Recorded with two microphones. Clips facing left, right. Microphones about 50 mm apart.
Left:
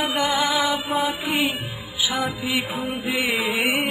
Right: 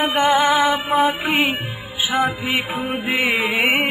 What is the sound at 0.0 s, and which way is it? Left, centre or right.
Music, right.